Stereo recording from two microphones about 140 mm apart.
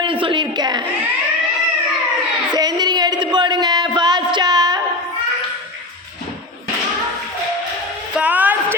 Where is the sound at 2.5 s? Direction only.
30° right (ahead or behind).